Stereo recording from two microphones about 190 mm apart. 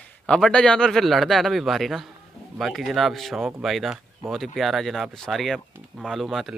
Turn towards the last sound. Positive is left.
turn(degrees=0)  # may be behind; listen again after turning